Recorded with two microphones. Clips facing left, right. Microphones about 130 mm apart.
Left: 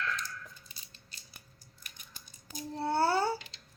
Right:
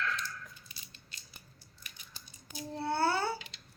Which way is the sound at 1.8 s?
45° left (ahead or behind).